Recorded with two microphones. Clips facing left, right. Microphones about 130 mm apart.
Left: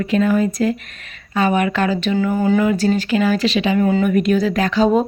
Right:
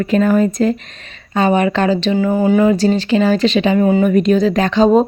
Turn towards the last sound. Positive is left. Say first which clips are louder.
# right 4 dB
turn(degrees=-30)  # may be behind; listen again after turning